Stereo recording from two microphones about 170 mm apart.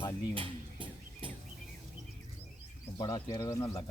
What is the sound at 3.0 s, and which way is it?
Speech, 25° left (ahead or behind).